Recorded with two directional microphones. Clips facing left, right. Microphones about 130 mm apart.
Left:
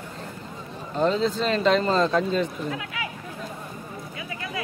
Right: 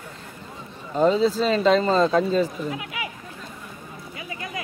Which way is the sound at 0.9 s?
5° right (ahead or behind).